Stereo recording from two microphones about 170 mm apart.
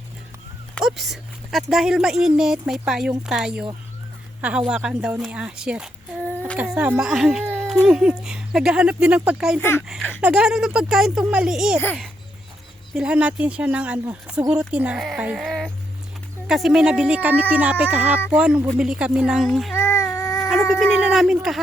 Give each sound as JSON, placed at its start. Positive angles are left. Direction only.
{"t": 0.8, "sound": "speech", "side_deg": 0}
{"t": 9.6, "sound": "speech", "side_deg": 15}
{"t": 10.2, "sound": "speech", "side_deg": -5}
{"t": 12.9, "sound": "speech", "side_deg": -5}
{"t": 19.7, "sound": "a sound", "side_deg": 15}
{"t": 20.5, "sound": "speech", "side_deg": 0}